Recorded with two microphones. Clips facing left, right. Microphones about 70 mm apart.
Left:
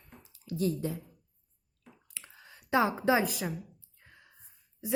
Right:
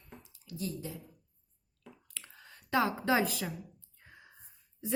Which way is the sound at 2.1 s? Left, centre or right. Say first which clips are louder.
Left 1 dB; centre.